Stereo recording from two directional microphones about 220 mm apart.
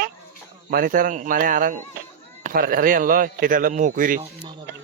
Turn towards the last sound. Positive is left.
turn(degrees=-40)  # may be behind; listen again after turning